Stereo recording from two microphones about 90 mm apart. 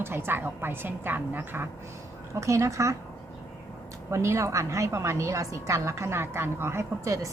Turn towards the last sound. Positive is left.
turn(degrees=-35)  # may be behind; listen again after turning